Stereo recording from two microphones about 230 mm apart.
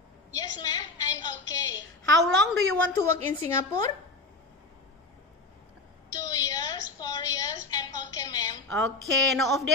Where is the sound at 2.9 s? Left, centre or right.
Centre.